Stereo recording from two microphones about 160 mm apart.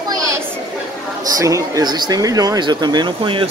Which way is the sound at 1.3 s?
20° right (ahead or behind).